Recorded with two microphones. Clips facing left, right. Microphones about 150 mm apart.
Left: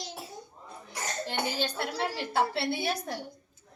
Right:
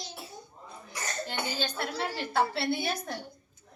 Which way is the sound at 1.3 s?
30° left (ahead or behind).